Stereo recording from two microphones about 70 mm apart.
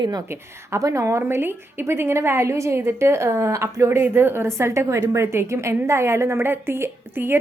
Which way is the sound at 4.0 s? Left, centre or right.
Right.